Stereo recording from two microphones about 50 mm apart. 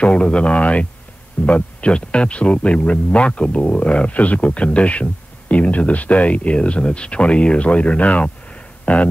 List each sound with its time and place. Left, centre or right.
0.0 s speech: left